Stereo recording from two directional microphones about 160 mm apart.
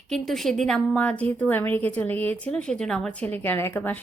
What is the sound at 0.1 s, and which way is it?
A woman's voice, centre (ahead or behind).